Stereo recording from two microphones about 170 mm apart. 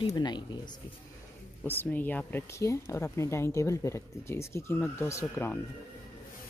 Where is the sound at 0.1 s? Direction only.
25° left (ahead or behind).